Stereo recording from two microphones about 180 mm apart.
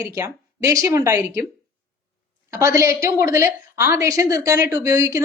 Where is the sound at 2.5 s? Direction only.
15° right (ahead or behind).